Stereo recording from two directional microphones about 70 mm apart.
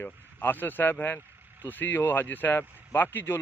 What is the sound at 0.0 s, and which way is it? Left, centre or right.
Speech, left.